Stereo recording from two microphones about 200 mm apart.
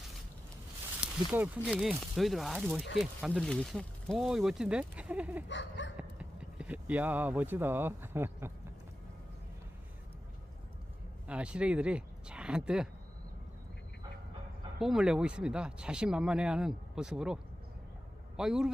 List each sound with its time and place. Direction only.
1.0 s speech: 10° right (ahead or behind)
5.5 s dog: 65° left (ahead or behind)
6.0 s speech: 5° right (ahead or behind)
11.3 s speech: 5° right (ahead or behind)
14.8 s speech: centre (ahead or behind)